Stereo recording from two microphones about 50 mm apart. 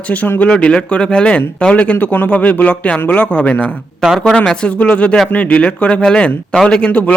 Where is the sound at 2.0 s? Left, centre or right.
Left.